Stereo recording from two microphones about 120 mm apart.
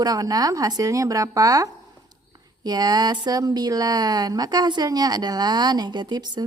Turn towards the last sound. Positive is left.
turn(degrees=-35)  # may be behind; listen again after turning